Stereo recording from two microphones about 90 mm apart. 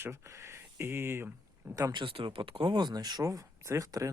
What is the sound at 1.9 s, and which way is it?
Speech, 75° right (ahead or behind).